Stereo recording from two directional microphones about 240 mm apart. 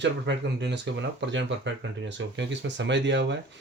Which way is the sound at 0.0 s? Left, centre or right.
Right.